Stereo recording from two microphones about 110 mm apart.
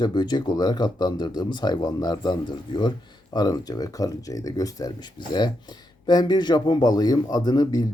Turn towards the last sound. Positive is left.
turn(degrees=40)  # may be behind; listen again after turning